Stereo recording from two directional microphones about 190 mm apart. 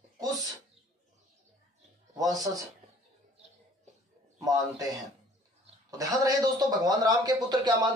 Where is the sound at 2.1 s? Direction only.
20° right (ahead or behind).